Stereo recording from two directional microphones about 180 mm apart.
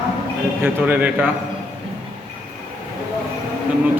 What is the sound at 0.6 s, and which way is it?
Speech, 10° right (ahead or behind).